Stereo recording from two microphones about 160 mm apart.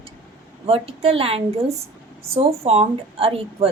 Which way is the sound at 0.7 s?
35° right (ahead or behind).